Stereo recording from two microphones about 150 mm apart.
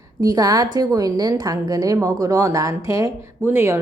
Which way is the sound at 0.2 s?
25° right (ahead or behind).